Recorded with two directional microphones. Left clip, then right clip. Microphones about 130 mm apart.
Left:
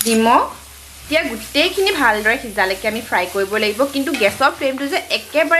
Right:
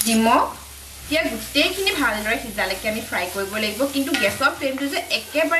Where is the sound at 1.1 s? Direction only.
20° left (ahead or behind).